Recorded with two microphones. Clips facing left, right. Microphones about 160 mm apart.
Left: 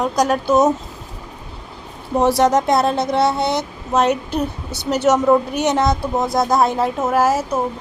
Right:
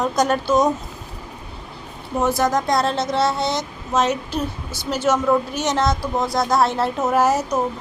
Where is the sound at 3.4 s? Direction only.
60° left (ahead or behind).